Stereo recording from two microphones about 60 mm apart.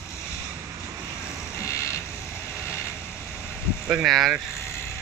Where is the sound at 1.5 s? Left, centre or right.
Left.